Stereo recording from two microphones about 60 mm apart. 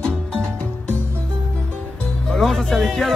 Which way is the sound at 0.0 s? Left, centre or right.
Centre.